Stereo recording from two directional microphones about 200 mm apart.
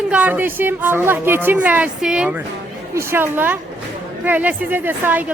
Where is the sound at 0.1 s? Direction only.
5° right (ahead or behind).